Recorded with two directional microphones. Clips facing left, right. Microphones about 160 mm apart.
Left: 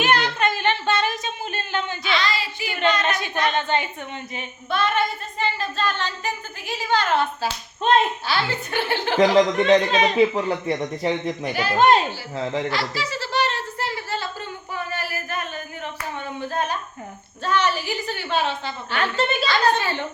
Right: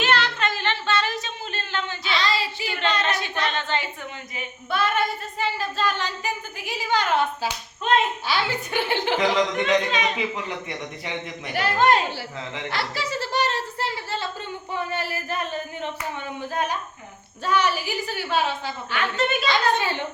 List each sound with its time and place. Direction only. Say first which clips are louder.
0.0 s a sound: left 3 dB; 15° left (ahead or behind)
2.0 s child singing: right 2 dB; 35° right (ahead or behind)
3.0 s speech: left 2 dB; 15° left (ahead or behind)
4.7 s speech: left 1 dB; 5° right (ahead or behind)
9.1 s a man's voice: left 7 dB; 40° left (ahead or behind)
11.8 s a woman's voice: left 3 dB; 25° left (ahead or behind)
12.7 s speech: left 1 dB; 55° right (ahead or behind); by 14.3 s 25° right (ahead or behind)
14.8 s singing: right 1 dB; 25° right (ahead or behind)
16.4 s speech: left 1 dB; 15° right (ahead or behind)
18.9 s a man's voice: left 2 dB; 35° left (ahead or behind)
19.5 s speech: left 2 dB; 15° right (ahead or behind)